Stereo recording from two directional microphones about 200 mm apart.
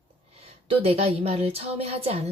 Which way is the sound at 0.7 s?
30° right (ahead or behind).